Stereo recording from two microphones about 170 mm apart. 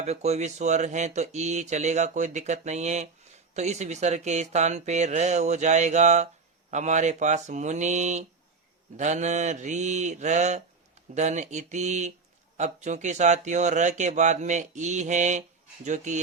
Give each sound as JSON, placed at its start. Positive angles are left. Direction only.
{"t": 0.0, "sound": "speech", "side_deg": -40}